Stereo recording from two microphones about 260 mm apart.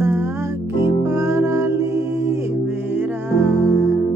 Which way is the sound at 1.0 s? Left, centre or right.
Centre.